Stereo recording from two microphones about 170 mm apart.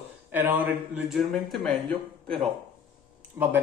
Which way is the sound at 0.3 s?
10° right (ahead or behind).